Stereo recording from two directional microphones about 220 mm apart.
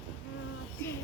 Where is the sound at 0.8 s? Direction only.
10° left (ahead or behind).